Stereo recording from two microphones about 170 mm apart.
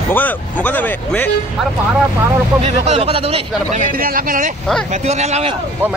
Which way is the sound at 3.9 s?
55° right (ahead or behind).